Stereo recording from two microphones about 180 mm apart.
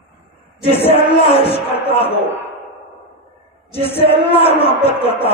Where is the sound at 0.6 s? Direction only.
30° left (ahead or behind).